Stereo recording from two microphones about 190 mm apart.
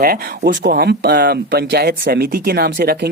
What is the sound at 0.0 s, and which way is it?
Speech, 55° right (ahead or behind).